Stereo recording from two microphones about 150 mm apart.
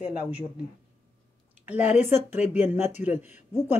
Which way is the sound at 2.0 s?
15° right (ahead or behind).